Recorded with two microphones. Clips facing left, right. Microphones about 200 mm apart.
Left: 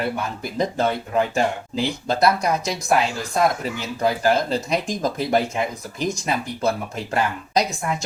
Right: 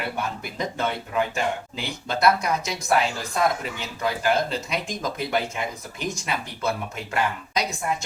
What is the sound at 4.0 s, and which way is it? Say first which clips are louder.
Speech: left 4 dB; 35° left (ahead or behind).